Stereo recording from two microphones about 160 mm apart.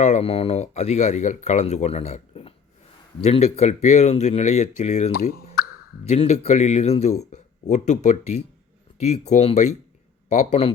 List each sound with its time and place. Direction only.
0.0 s speech: 45° left (ahead or behind)